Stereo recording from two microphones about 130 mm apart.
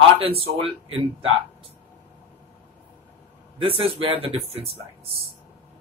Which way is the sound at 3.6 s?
40° right (ahead or behind).